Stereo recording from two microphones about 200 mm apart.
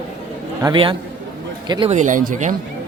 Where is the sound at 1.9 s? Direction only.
40° right (ahead or behind).